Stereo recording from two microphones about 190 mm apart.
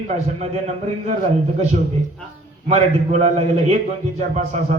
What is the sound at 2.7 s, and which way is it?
A man's voice, 35° right (ahead or behind).